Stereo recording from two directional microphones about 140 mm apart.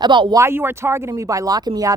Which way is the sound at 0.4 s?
15° right (ahead or behind).